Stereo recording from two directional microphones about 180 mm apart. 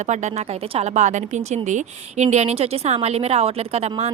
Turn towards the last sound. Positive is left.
turn(degrees=-35)  # may be behind; listen again after turning